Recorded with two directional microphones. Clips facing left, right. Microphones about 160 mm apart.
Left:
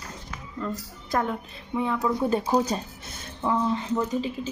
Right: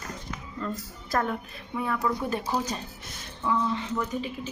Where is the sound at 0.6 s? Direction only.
15° left (ahead or behind); by 4.3 s 30° left (ahead or behind).